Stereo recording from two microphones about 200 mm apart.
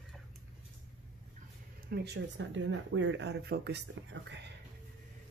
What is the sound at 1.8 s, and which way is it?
Speech, 55° right (ahead or behind).